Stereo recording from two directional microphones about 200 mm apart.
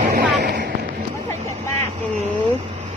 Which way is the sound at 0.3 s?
50° right (ahead or behind).